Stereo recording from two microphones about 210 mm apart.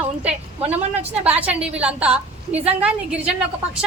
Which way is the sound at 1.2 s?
5° right (ahead or behind).